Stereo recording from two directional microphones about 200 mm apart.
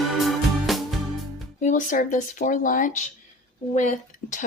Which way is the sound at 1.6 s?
40° left (ahead or behind).